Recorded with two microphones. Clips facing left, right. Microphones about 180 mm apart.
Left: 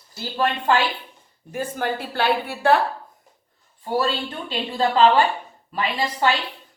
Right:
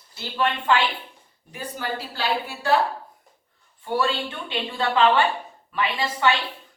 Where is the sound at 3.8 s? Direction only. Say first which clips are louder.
Left 1 dB; 40° left (ahead or behind).